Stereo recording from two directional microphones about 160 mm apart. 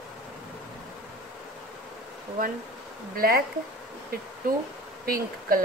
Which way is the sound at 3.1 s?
70° right (ahead or behind).